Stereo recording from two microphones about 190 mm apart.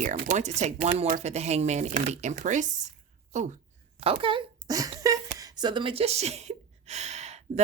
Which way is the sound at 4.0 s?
30° right (ahead or behind).